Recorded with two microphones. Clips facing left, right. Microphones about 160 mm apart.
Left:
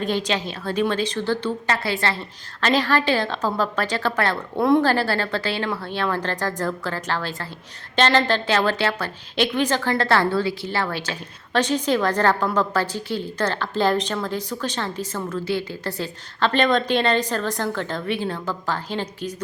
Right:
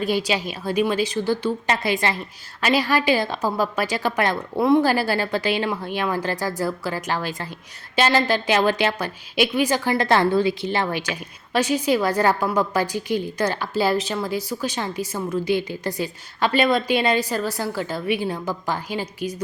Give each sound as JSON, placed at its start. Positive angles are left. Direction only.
{"t": 0.0, "sound": "a woman's voice", "side_deg": -10}